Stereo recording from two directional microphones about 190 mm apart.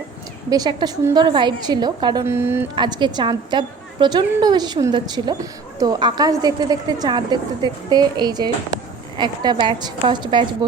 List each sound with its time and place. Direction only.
0.5 s a woman's voice: 20° right (ahead or behind)
2.2 s speech: 10° right (ahead or behind)
2.7 s a woman's voice: 25° right (ahead or behind)